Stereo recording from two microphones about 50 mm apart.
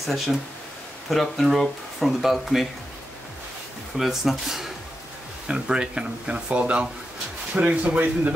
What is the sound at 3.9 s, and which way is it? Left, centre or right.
Speech, centre.